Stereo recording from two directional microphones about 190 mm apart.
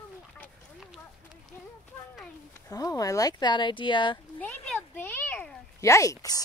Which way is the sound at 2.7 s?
20° left (ahead or behind).